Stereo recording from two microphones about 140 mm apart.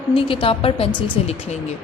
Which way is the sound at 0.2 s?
40° left (ahead or behind).